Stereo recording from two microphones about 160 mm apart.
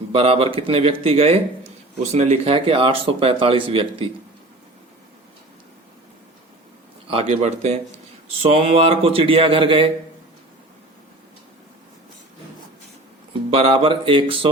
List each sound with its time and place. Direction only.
0.1 s speech: 35° right (ahead or behind)
7.1 s speech: 40° right (ahead or behind)
13.5 s speech: 40° right (ahead or behind)